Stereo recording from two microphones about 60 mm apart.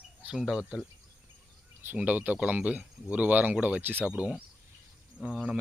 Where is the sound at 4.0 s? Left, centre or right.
Centre.